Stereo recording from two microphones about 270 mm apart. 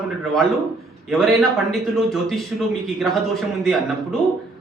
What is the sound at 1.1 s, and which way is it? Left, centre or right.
A man's voice, centre.